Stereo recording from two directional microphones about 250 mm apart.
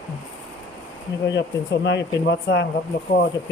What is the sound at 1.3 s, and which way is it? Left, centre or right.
Speech, left.